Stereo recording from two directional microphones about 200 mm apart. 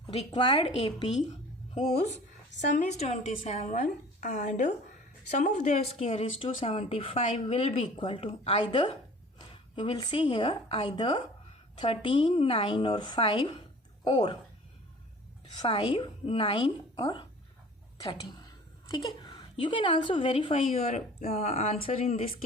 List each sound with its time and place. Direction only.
0.1 s a woman's voice: 25° left (ahead or behind)
15.5 s a woman's voice: 25° left (ahead or behind)